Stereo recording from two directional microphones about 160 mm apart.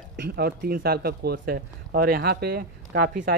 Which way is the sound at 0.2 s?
75° right (ahead or behind).